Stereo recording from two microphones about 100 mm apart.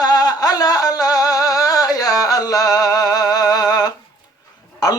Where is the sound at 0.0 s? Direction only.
40° left (ahead or behind).